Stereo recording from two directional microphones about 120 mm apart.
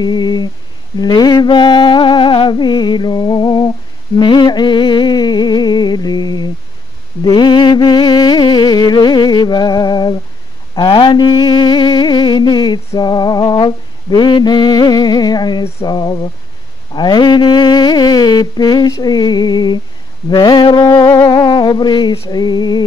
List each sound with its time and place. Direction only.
0.0 s mantra: 35° left (ahead or behind)
1.0 s music: 35° left (ahead or behind)
4.2 s a sound: 40° left (ahead or behind)
7.2 s music: 40° left (ahead or behind)
10.7 s mantra: 40° left (ahead or behind)
20.2 s a sound: 40° left (ahead or behind)